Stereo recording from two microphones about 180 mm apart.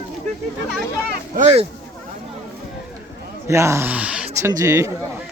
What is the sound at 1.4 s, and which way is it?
Speech, 35° right (ahead or behind).